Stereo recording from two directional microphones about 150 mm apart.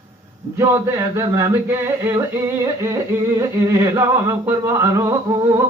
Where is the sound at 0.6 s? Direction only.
20° right (ahead or behind).